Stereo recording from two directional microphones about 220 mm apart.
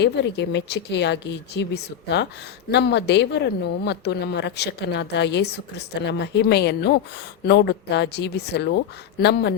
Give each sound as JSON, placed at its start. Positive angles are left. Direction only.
{"t": 0.0, "sound": "a woman's voice", "side_deg": 50}